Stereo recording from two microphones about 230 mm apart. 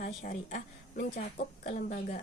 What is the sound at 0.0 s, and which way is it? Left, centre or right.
A woman's voice, left.